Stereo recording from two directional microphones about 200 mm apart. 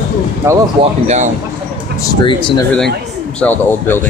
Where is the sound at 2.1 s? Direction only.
20° left (ahead or behind).